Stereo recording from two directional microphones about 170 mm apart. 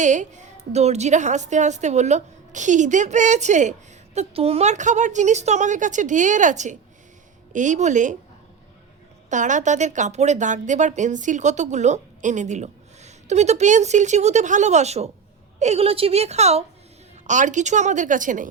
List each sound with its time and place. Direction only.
0.0 s a woman's voice: 45° right (ahead or behind)
9.3 s a woman's voice: 45° right (ahead or behind)